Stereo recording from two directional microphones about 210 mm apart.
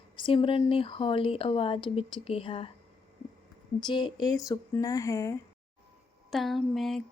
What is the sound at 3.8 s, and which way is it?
Speech, 20° left (ahead or behind).